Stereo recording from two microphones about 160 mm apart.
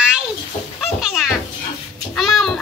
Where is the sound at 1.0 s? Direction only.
Centre (ahead or behind).